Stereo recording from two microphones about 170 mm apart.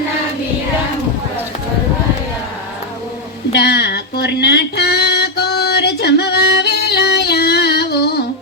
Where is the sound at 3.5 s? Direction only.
80° left.